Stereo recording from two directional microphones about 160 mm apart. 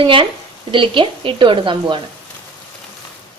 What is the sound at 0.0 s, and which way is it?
Speech, 35° right (ahead or behind).